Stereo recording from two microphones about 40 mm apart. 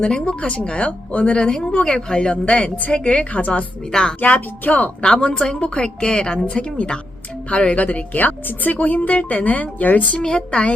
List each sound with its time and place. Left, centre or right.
0.0 s speech: left
3.9 s speech: centre
4.4 s speech: left
5.0 s speech: left
10.2 s speech: left